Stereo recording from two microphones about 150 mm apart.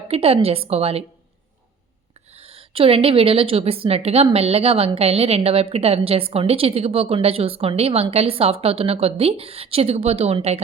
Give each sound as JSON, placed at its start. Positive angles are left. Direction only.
{"t": 0.1, "sound": "a woman's voice", "side_deg": -40}
{"t": 2.3, "sound": "a woman's voice", "side_deg": -40}